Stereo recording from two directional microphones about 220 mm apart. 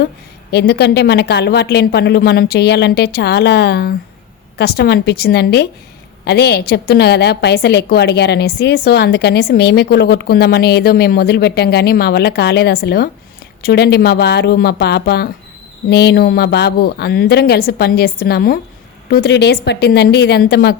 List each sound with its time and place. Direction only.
0.5 s a woman's voice: 50° left (ahead or behind)